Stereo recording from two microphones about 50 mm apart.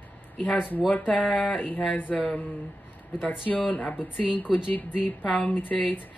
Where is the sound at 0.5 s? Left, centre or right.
Left.